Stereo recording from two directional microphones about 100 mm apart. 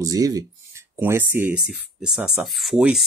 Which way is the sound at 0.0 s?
35° right (ahead or behind).